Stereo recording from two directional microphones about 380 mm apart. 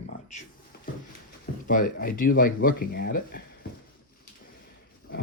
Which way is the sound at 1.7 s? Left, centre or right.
Left.